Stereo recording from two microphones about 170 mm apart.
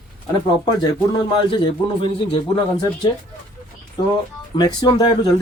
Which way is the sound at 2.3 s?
25° left (ahead or behind).